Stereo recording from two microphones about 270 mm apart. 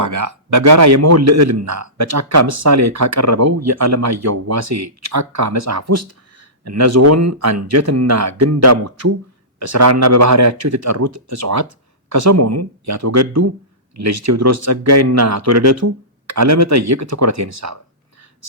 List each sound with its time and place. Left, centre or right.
0.0 s a man's voice: right
9.6 s a man's voice: right